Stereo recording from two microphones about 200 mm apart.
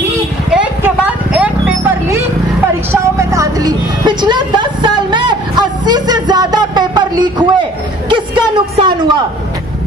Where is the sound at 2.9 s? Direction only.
15° right (ahead or behind).